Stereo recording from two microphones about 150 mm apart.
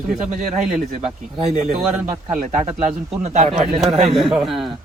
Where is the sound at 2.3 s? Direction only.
60° right (ahead or behind).